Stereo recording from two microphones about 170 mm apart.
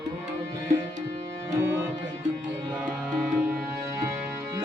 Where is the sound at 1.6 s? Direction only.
15° right (ahead or behind).